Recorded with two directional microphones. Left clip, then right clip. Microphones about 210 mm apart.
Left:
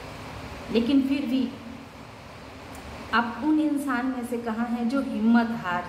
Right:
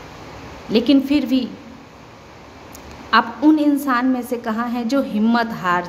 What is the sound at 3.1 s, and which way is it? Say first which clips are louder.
Speech: right 9 dB; 55° right (ahead or behind).